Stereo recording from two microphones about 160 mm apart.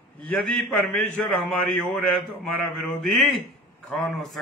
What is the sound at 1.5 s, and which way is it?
Speech, 5° left (ahead or behind).